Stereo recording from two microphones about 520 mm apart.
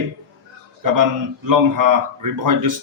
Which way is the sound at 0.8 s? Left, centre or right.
Right.